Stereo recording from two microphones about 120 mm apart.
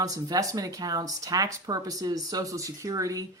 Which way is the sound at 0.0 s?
30° right (ahead or behind).